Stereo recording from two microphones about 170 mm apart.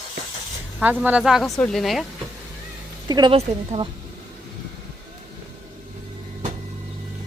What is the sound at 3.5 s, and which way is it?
Speech, 35° right (ahead or behind).